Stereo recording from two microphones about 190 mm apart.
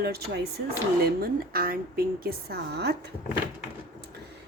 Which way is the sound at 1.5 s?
50° right (ahead or behind).